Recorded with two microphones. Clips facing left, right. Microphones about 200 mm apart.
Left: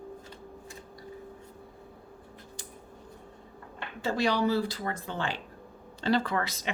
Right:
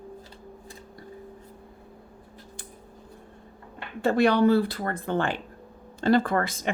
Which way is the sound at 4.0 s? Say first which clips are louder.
Right 7 dB; 55° right (ahead or behind).